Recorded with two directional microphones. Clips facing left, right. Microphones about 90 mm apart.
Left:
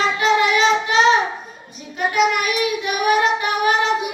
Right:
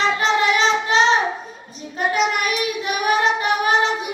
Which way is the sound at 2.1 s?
35° right (ahead or behind).